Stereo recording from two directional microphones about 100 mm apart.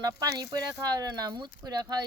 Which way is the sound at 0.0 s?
40° right (ahead or behind).